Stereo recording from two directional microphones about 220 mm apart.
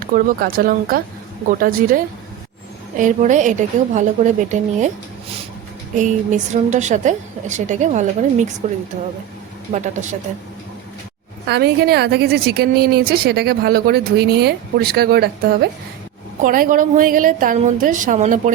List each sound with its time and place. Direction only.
0.1 s a woman's voice: 40° right (ahead or behind)
3.0 s a woman's voice: 35° right (ahead or behind)
6.0 s a woman's voice: 35° right (ahead or behind)
9.7 s a woman's voice: 35° right (ahead or behind)
11.4 s a woman's voice: 50° right (ahead or behind)